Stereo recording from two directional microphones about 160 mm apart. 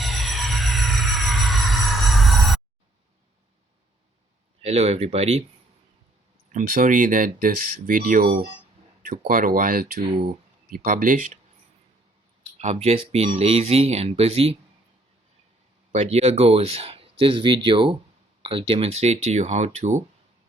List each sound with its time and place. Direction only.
0.0 s a sound: centre (ahead or behind)
4.6 s speech: 40° right (ahead or behind)
6.5 s speech: 55° right (ahead or behind)
12.5 s speech: 45° right (ahead or behind)
15.9 s speech: 45° right (ahead or behind)